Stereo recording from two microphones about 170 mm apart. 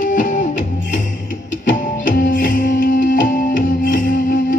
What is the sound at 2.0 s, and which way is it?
Music, 55° left (ahead or behind).